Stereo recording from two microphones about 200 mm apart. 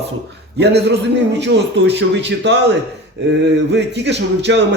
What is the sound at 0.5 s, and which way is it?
Speech, 55° right (ahead or behind).